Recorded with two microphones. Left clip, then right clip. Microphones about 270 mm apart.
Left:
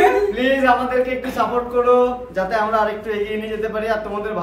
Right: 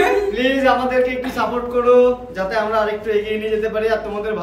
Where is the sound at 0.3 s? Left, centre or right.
Centre.